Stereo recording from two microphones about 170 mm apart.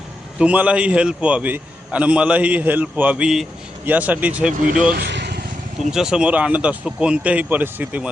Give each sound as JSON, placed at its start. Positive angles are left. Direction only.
{"t": 0.3, "sound": "a man's voice", "side_deg": -10}
{"t": 4.9, "sound": "vehicle", "side_deg": -80}
{"t": 5.9, "sound": "a man's voice", "side_deg": -5}